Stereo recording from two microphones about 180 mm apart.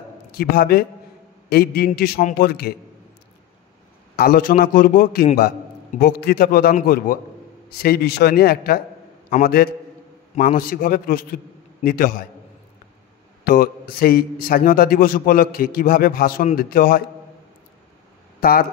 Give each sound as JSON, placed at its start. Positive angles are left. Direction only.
{"t": 0.3, "sound": "a man's voice", "side_deg": 60}
{"t": 4.2, "sound": "a man's voice", "side_deg": 55}
{"t": 13.4, "sound": "a man's voice", "side_deg": 55}
{"t": 18.4, "sound": "speech", "side_deg": 55}